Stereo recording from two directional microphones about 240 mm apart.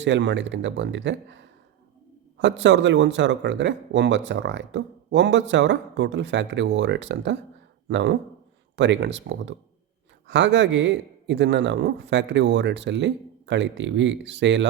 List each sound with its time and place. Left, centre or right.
0.0 s speech: right